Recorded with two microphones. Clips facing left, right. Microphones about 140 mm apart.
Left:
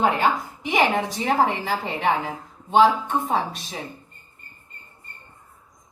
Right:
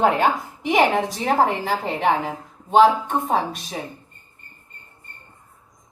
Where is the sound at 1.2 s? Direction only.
45° right (ahead or behind).